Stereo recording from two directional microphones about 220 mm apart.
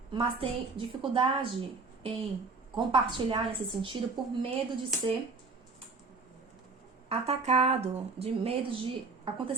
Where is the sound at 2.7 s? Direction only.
20° right (ahead or behind).